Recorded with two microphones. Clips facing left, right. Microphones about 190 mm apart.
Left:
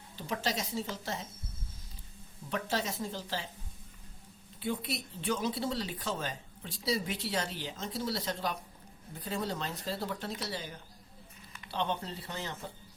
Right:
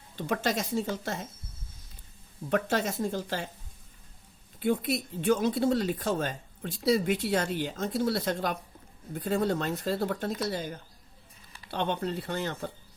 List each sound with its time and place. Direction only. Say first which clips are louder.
0.2 s speech: right 6 dB; 55° right (ahead or behind)
2.5 s speech: right 7 dB; 55° right (ahead or behind)
4.6 s speech: right 8 dB; 50° right (ahead or behind)
11.7 s speech: right 5 dB; 60° right (ahead or behind)